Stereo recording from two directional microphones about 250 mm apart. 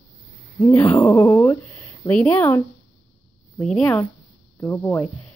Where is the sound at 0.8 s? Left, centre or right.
Centre.